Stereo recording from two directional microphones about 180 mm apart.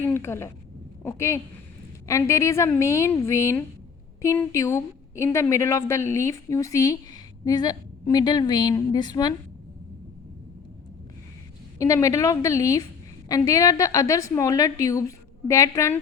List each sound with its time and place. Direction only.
0.1 s a woman's voice: 15° left (ahead or behind)
11.8 s a woman's voice: 15° left (ahead or behind)